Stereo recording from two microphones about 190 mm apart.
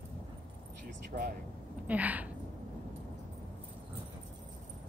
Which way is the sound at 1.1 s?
50° right (ahead or behind).